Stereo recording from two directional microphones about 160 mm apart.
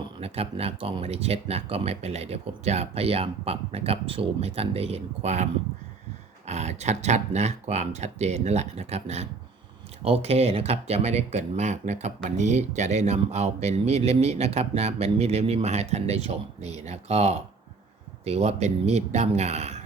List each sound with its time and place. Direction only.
0.2 s speech: 40° right (ahead or behind)